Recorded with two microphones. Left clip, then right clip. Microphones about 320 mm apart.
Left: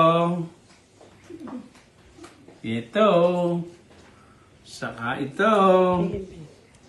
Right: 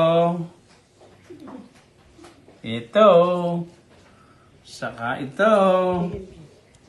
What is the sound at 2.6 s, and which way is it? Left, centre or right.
Speech, centre.